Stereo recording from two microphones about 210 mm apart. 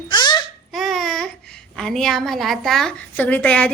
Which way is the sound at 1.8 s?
Centre (ahead or behind).